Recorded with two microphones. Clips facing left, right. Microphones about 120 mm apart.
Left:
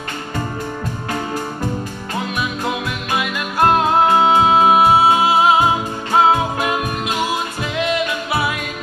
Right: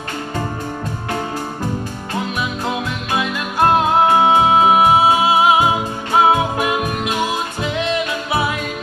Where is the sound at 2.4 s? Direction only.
25° right (ahead or behind).